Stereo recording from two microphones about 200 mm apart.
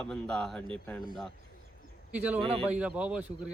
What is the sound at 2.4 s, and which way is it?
Speech, 25° right (ahead or behind).